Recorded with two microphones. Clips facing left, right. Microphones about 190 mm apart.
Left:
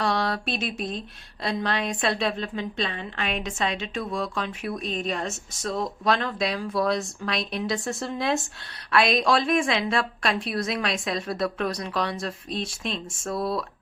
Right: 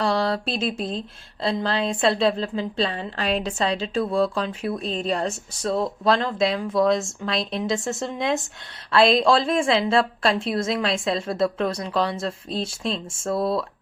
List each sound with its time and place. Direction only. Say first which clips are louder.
0.0 s speech: right 3 dB; 30° right (ahead or behind)